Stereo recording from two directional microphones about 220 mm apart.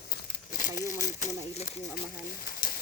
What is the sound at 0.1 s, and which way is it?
Crumpling, 35° left (ahead or behind).